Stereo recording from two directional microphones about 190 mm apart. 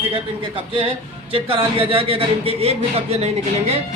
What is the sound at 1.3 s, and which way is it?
A man's voice, 30° right (ahead or behind).